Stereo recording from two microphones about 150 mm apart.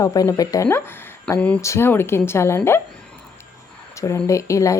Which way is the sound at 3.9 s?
20° left (ahead or behind).